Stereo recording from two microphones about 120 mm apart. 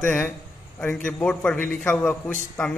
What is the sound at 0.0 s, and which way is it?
A man's voice, 15° left (ahead or behind).